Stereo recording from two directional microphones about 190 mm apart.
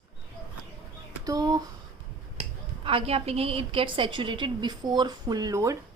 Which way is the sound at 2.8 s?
30° right (ahead or behind).